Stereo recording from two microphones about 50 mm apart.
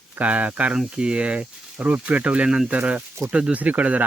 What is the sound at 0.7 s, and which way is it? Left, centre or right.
Speech, centre.